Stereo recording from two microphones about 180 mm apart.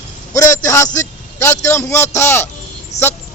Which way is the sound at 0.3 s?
15° left (ahead or behind).